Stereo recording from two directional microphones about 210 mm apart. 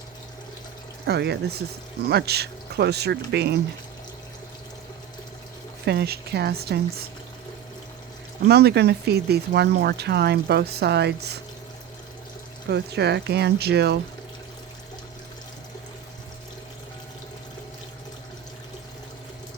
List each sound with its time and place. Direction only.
1.0 s speech: 50° right (ahead or behind)
5.8 s speech: 50° right (ahead or behind)
8.4 s speech: 50° right (ahead or behind)
12.7 s speech: 50° right (ahead or behind)